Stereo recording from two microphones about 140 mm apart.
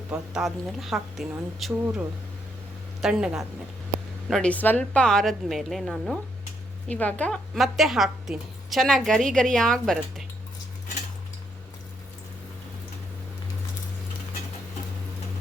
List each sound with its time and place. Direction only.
0.1 s a woman's voice: 5° right (ahead or behind)
3.0 s a woman's voice: 5° right (ahead or behind)
4.3 s a woman's voice: 5° left (ahead or behind)